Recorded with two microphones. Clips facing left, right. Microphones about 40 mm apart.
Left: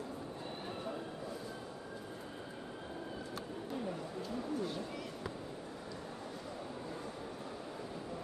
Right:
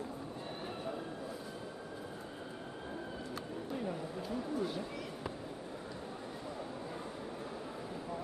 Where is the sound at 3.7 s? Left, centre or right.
Centre.